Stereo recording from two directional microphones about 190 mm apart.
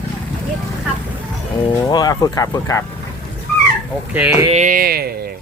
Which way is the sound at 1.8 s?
20° left (ahead or behind).